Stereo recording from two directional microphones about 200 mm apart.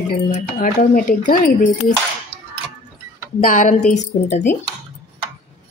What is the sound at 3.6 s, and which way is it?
Speech, 35° left (ahead or behind).